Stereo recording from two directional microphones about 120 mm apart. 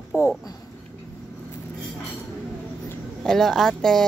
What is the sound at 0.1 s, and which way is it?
Speech, 25° left (ahead or behind).